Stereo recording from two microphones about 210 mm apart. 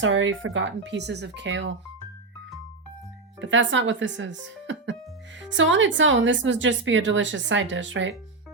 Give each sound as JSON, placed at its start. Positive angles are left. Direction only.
{"t": 0.0, "sound": "speech", "side_deg": -65}
{"t": 3.4, "sound": "speech", "side_deg": -60}